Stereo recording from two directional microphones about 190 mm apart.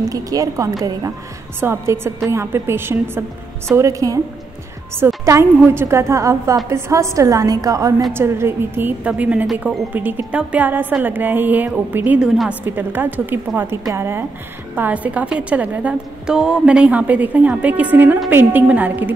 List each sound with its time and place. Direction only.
0.1 s a woman's voice: 20° right (ahead or behind)